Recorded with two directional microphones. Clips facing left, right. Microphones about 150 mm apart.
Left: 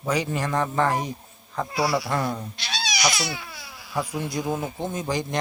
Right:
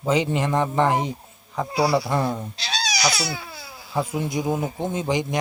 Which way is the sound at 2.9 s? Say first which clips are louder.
Right 1 dB; 35° right (ahead or behind).